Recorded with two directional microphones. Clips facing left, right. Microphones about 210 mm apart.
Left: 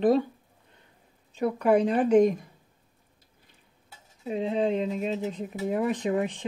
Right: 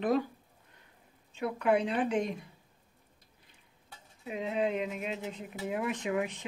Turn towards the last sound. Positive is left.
turn(degrees=35)  # may be behind; listen again after turning